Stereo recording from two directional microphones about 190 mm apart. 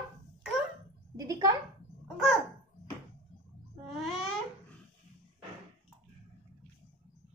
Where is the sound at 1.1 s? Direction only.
20° right (ahead or behind).